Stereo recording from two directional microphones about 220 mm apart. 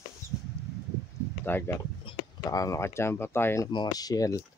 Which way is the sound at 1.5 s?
10° left (ahead or behind).